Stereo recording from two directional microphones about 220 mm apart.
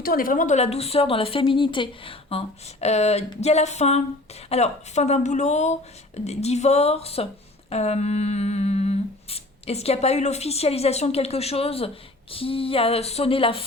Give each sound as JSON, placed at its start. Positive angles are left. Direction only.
{"t": 0.0, "sound": "humming", "side_deg": 40}
{"t": 4.4, "sound": "speech", "side_deg": 30}
{"t": 6.1, "sound": "humming", "side_deg": 30}